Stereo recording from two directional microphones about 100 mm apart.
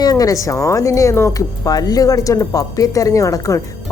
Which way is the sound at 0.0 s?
40° left (ahead or behind).